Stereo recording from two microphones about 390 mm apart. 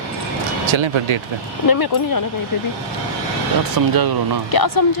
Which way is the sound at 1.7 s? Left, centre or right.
Left.